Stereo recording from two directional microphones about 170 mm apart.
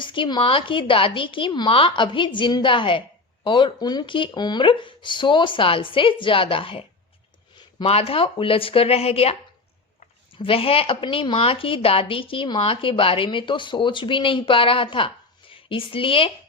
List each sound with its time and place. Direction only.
0.0 s speech: 30° left (ahead or behind)